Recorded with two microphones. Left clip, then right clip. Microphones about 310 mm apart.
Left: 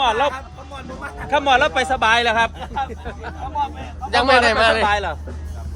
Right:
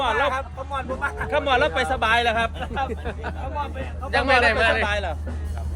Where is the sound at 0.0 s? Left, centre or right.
Left.